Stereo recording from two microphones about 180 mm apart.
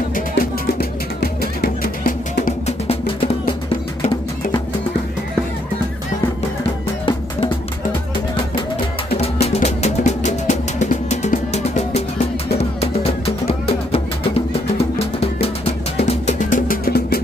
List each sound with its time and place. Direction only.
0.1 s music: 55° left (ahead or behind)
7.1 s music: 25° left (ahead or behind)
9.2 s music: 35° left (ahead or behind); by 17.2 s 60° left (ahead or behind)